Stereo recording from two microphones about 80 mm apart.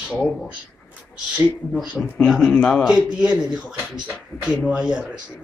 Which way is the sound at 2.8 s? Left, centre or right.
Centre.